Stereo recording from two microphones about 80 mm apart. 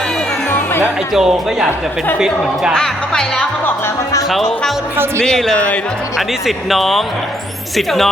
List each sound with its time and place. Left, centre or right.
0.5 s music: left
1.1 s a woman's voice: centre
2.7 s speech: centre
5.5 s speech: centre
6.1 s speech: centre